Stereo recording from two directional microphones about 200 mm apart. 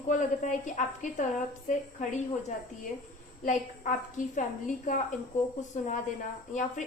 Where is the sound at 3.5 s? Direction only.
40° left (ahead or behind).